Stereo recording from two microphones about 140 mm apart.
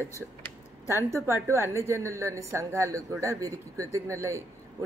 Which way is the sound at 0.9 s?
20° right (ahead or behind).